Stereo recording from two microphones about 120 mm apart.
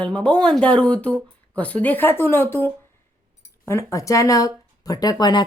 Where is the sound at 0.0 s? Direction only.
10° left (ahead or behind).